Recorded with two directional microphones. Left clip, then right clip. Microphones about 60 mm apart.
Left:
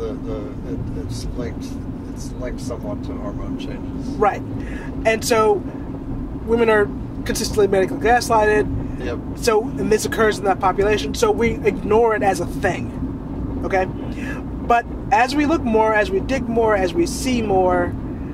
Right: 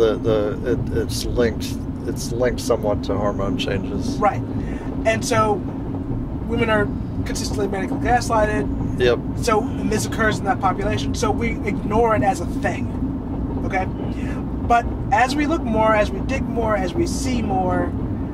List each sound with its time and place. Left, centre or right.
0.0 s speech: right
4.2 s speech: left
14.7 s speech: left